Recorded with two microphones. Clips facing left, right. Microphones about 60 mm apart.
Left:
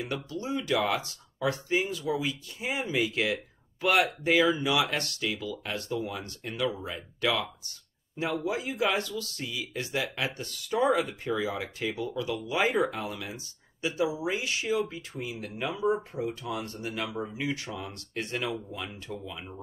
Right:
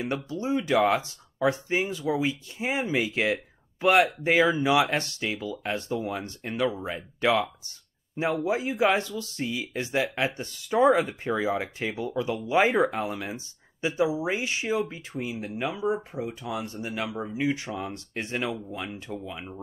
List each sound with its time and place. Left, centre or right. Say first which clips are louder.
0.0 s speech: right 4 dB; right